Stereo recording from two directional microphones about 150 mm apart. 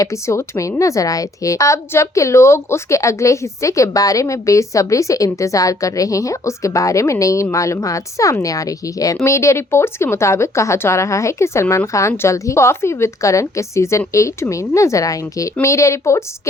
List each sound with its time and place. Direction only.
0.0 s a woman's voice: 20° left (ahead or behind)